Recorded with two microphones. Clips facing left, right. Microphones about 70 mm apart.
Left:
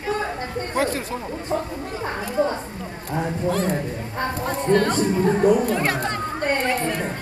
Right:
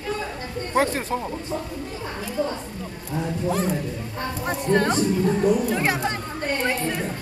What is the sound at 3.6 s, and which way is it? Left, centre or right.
Speech, left.